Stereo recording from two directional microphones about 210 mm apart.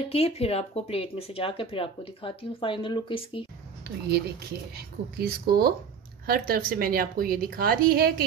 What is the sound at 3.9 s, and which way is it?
A woman's voice, 50° right (ahead or behind).